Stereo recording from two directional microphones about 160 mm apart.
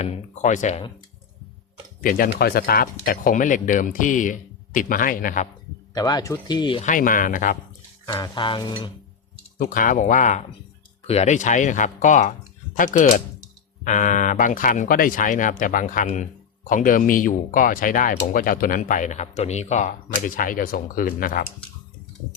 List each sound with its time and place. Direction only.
0.0 s speech: 45° left (ahead or behind)
2.0 s speech: 60° left (ahead or behind)
5.9 s speech: 25° left (ahead or behind)
6.8 s speech: 55° left (ahead or behind)
8.0 s speech: 25° left (ahead or behind)
9.6 s speech: 60° left (ahead or behind)
11.0 s speech: 40° left (ahead or behind); by 21.4 s 60° left (ahead or behind)